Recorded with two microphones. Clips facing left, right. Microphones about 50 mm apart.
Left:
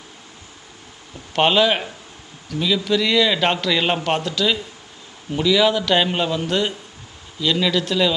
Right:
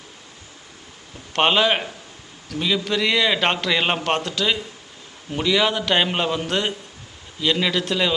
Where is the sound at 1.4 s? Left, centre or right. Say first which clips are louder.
Left 1 dB; centre.